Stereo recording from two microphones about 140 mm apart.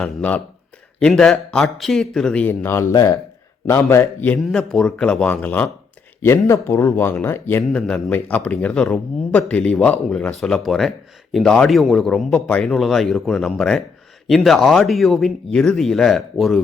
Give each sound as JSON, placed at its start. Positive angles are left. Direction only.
{"t": 0.0, "sound": "speech", "side_deg": 10}
{"t": 4.4, "sound": "speech", "side_deg": 0}